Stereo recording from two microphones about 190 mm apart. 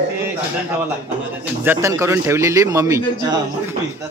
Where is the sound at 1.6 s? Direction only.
15° right (ahead or behind).